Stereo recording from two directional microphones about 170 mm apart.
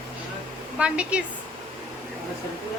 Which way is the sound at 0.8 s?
5° right (ahead or behind).